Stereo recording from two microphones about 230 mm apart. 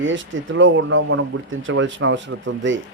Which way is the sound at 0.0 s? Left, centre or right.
Right.